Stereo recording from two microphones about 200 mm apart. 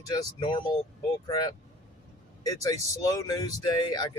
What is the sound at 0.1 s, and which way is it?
Speech, 25° left (ahead or behind).